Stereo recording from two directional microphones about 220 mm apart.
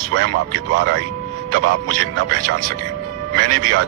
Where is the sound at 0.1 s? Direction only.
75° right (ahead or behind).